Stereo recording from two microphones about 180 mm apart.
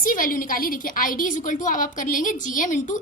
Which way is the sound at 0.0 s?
50° left (ahead or behind).